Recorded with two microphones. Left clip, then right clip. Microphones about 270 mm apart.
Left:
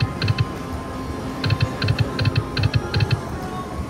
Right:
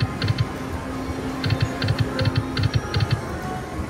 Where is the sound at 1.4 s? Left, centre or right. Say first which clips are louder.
Left 3 dB; left.